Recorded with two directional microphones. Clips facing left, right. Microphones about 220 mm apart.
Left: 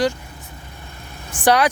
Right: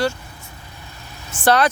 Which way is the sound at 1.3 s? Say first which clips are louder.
Even; 15° left (ahead or behind).